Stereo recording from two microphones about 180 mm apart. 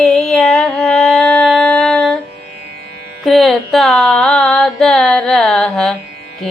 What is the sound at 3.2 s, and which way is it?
Music, centre (ahead or behind).